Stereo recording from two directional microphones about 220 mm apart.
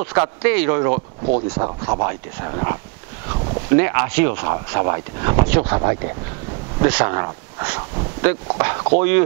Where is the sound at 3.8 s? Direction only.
15° right (ahead or behind).